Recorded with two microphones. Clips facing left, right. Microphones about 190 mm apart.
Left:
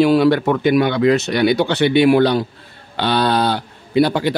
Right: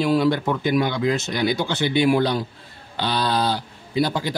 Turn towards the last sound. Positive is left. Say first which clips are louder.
# left 7 dB
turn(degrees=65)  # may be behind; listen again after turning